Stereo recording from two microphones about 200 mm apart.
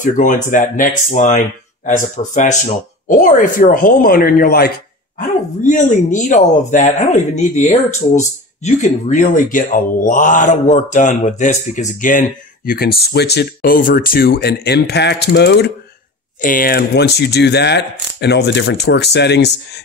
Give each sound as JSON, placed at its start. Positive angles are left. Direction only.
{"t": 0.0, "sound": "speech", "side_deg": 40}
{"t": 12.6, "sound": "speech", "side_deg": 50}
{"t": 16.3, "sound": "speech", "side_deg": 45}